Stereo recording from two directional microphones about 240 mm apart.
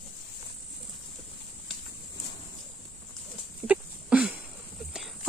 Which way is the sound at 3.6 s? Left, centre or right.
Centre.